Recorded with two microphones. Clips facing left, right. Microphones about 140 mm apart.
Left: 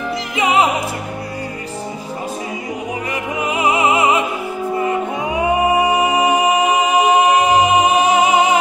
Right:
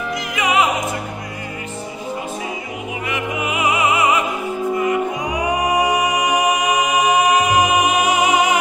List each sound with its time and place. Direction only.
0.4 s opera: 30° left (ahead or behind)
3.1 s music: 30° left (ahead or behind)